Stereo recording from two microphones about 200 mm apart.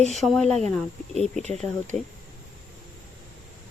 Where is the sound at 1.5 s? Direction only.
35° right (ahead or behind).